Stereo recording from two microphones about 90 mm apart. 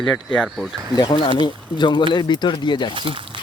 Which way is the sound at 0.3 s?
Centre (ahead or behind).